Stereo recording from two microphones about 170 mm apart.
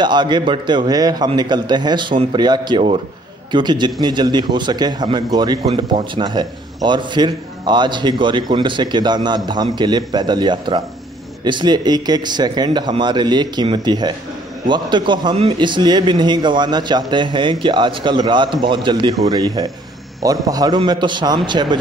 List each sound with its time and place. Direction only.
0.0 s a man's voice: 25° right (ahead or behind)